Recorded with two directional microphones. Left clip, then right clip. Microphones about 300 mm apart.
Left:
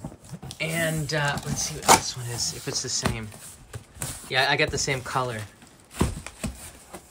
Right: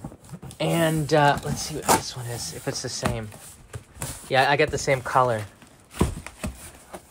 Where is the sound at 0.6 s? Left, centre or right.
Centre.